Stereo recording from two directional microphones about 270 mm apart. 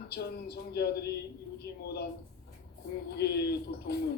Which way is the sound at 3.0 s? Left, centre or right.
Left.